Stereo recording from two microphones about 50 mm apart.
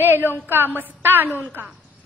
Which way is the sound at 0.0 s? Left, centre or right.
Right.